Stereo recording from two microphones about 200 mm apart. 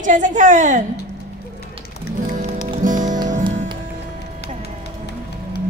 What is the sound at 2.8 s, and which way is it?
Music, 40° right (ahead or behind).